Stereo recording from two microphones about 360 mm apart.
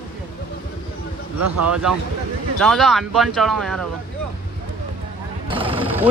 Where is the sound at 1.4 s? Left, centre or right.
Right.